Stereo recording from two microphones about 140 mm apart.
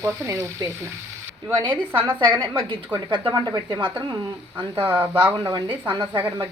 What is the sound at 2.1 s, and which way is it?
A woman's voice, 35° right (ahead or behind).